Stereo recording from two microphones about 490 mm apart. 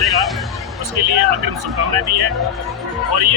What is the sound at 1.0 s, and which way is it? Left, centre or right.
Speech, right.